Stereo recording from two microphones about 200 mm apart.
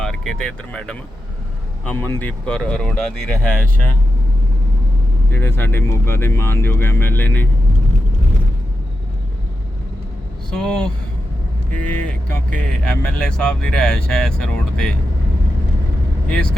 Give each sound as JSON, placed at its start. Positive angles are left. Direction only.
{"t": 0.0, "sound": "speech", "side_deg": 0}
{"t": 5.3, "sound": "speech", "side_deg": 10}
{"t": 10.5, "sound": "speech", "side_deg": 5}